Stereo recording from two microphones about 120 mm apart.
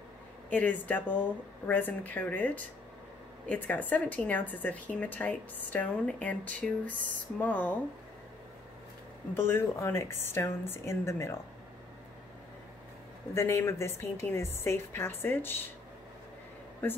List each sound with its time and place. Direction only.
0.5 s speech: 15° left (ahead or behind)
9.3 s a woman's voice: 20° left (ahead or behind)
13.3 s a woman's voice: 25° left (ahead or behind)
16.8 s speech: 15° left (ahead or behind)